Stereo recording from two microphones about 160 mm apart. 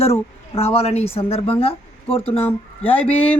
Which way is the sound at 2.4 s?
10° left (ahead or behind).